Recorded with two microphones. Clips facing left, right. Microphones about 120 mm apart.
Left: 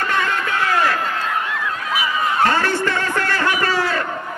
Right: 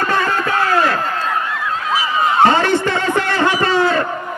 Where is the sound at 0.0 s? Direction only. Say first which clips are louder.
Right 3 dB; 35° right (ahead or behind).